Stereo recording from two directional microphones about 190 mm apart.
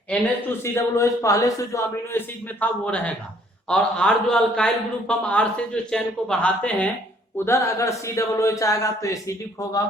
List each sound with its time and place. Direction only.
0.1 s a man's voice: 10° left (ahead or behind)